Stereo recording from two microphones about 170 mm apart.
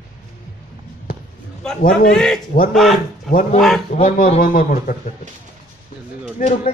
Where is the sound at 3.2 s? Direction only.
55° left (ahead or behind).